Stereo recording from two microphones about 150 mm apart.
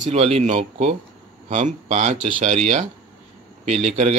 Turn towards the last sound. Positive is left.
turn(degrees=-50)  # may be behind; listen again after turning